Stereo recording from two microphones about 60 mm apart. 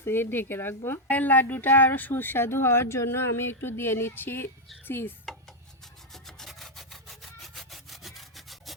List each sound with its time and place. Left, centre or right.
0.0 s speech: left
6.2 s sawing: centre